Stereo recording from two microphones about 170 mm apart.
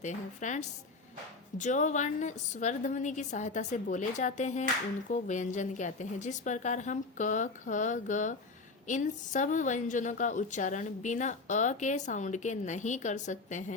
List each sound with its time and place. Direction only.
0.0 s a woman's voice: 45° left (ahead or behind)